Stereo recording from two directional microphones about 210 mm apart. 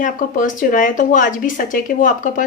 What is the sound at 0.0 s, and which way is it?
Speech, 40° left (ahead or behind).